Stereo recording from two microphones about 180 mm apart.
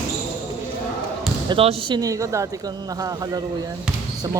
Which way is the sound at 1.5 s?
30° right (ahead or behind).